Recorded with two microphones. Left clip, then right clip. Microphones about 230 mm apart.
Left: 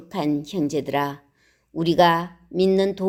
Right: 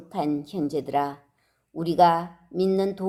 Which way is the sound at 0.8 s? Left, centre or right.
Left.